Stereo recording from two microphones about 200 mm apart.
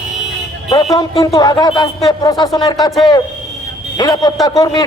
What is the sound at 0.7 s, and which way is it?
A man's voice, 20° left (ahead or behind).